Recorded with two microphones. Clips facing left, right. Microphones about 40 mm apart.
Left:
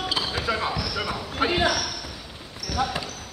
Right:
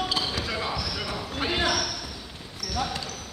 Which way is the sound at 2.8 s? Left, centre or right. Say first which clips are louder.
Left 5 dB; centre.